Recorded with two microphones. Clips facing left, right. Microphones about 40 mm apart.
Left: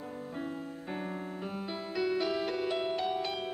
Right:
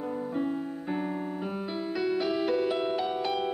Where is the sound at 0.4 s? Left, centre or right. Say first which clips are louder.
Right 6 dB; centre.